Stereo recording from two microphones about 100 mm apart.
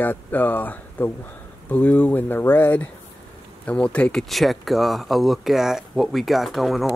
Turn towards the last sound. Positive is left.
turn(degrees=0)  # may be behind; listen again after turning